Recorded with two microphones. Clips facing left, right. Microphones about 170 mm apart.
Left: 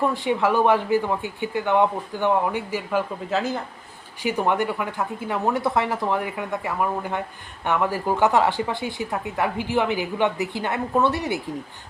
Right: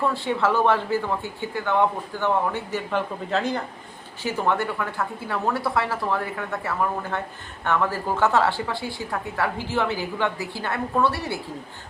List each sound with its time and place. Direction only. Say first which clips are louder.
0.0 s a woman's voice: left 2 dB; 15° left (ahead or behind)
4.2 s a woman's voice: left 2 dB; 15° left (ahead or behind)